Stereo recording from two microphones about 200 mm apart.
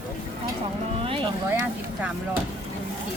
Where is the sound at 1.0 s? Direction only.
25° right (ahead or behind).